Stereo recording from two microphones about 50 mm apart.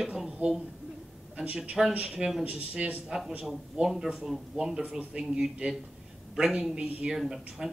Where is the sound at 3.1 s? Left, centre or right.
Centre.